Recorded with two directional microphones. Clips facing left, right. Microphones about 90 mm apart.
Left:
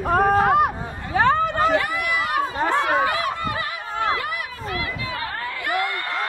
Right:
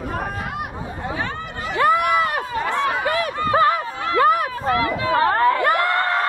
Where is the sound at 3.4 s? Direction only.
40° right (ahead or behind).